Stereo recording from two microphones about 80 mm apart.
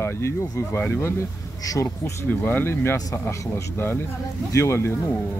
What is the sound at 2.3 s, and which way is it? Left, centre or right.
Speech, left.